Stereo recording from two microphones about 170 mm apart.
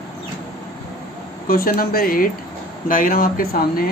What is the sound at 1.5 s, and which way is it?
Speech, 60° left (ahead or behind).